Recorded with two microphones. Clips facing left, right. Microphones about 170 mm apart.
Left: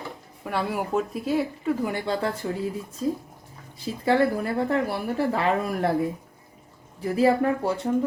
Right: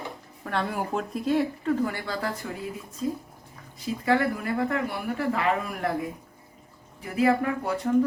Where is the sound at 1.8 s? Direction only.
20° left (ahead or behind).